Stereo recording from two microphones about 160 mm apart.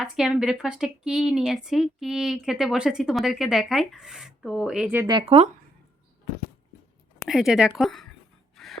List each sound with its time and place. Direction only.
0.0 s a woman's voice: 5° right (ahead or behind)
5.2 s speech: 40° right (ahead or behind)
7.2 s a woman's voice: 5° right (ahead or behind)
8.5 s gasp: centre (ahead or behind)